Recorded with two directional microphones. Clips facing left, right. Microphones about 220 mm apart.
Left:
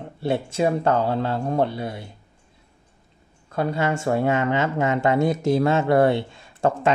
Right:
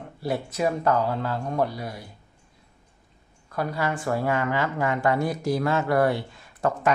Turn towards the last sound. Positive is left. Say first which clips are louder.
# left 4 dB
turn(degrees=25)  # may be behind; listen again after turning